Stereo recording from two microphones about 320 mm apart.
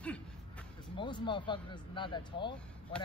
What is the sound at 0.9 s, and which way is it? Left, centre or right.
Speech, centre.